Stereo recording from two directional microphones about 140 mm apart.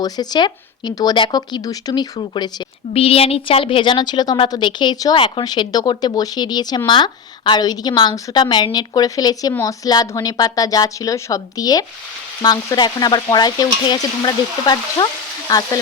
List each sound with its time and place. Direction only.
0.0 s stir: 30° left (ahead or behind)
2.9 s a woman's voice: 45° left (ahead or behind); by 9.6 s 25° left (ahead or behind)
9.6 s stir: 25° left (ahead or behind)